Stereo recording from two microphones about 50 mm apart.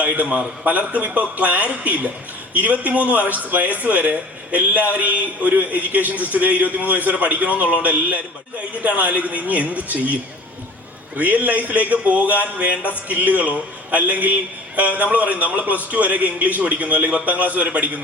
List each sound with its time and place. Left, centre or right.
0.0 s a man's voice: right
11.2 s a man's voice: right